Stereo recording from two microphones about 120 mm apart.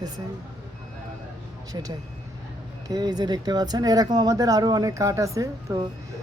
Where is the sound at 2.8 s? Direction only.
35° right (ahead or behind).